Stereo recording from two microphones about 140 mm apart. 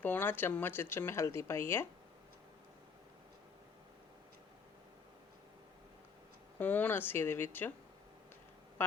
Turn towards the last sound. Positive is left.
turn(degrees=15)  # may be behind; listen again after turning